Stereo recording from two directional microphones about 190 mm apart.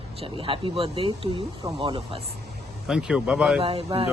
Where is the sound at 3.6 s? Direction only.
30° right (ahead or behind).